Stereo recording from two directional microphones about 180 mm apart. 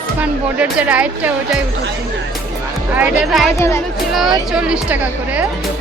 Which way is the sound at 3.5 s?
15° left (ahead or behind).